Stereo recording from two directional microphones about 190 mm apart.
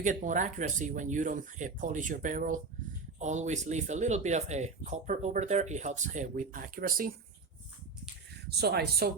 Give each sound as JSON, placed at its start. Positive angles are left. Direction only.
{"t": 0.0, "sound": "speech", "side_deg": -40}
{"t": 8.4, "sound": "speech", "side_deg": -60}